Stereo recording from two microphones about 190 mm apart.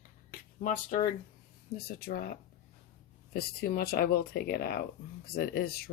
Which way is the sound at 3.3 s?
50° left (ahead or behind).